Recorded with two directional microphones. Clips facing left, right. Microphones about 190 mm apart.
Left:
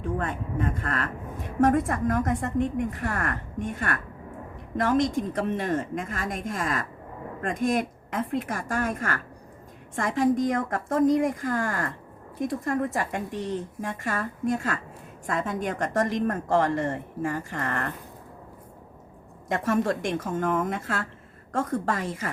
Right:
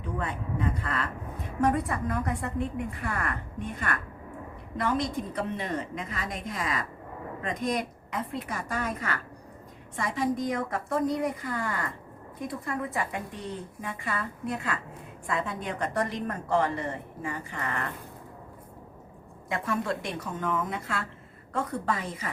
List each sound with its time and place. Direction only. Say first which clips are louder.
0.0 s a woman's voice: left 4 dB; 50° left (ahead or behind)
19.5 s a woman's voice: left 5 dB; 40° left (ahead or behind)